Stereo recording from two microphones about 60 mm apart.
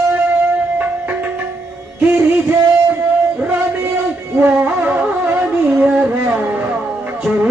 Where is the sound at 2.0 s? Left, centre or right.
Right.